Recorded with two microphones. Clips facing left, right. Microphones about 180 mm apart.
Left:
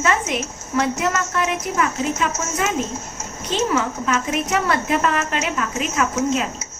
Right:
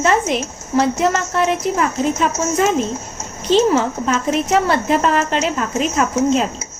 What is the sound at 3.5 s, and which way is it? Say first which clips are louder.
A woman's voice: right 7 dB; 30° right (ahead or behind).